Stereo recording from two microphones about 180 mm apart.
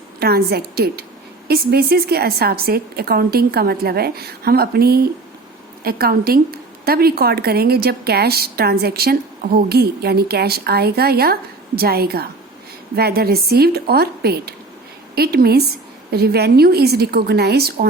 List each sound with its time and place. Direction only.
0.2 s a woman's voice: 60° right (ahead or behind)